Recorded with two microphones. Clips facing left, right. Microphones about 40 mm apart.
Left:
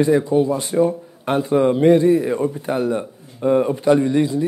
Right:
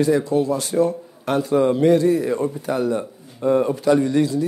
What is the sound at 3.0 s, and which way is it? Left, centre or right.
Speech, centre.